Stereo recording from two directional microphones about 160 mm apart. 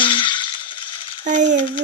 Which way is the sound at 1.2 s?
50° right (ahead or behind).